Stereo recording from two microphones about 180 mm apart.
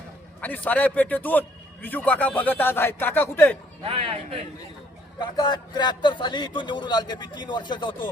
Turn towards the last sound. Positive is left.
turn(degrees=25)  # may be behind; listen again after turning